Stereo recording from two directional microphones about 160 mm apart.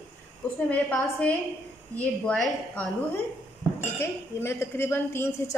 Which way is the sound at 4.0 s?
15° left (ahead or behind).